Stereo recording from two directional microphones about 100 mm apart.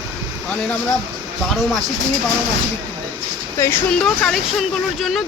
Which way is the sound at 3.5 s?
25° left (ahead or behind).